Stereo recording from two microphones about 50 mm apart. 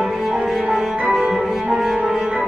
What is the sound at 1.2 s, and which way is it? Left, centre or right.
Cello, centre.